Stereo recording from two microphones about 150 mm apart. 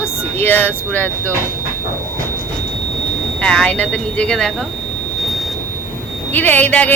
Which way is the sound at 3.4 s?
5° left (ahead or behind).